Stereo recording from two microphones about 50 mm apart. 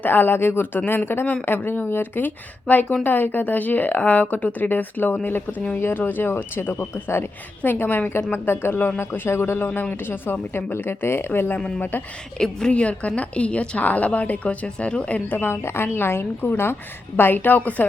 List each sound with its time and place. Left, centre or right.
0.0 s speech: left
7.6 s speech: left
12.4 s a woman's voice: centre
15.3 s speech: left